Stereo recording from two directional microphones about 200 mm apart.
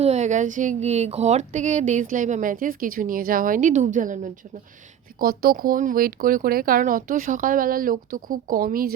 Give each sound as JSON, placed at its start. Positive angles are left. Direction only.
{"t": 0.0, "sound": "speech", "side_deg": -35}